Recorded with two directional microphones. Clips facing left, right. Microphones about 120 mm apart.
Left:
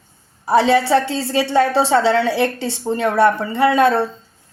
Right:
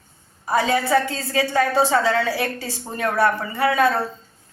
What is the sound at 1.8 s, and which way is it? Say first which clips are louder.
Speech: left 4 dB; 70° left (ahead or behind).